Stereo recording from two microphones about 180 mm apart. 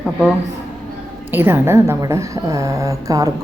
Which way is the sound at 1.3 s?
10° right (ahead or behind).